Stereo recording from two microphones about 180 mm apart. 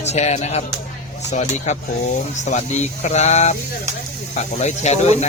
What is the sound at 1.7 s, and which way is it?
Speech, 40° left (ahead or behind).